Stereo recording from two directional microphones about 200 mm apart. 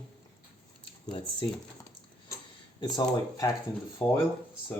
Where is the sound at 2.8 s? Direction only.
20° left (ahead or behind).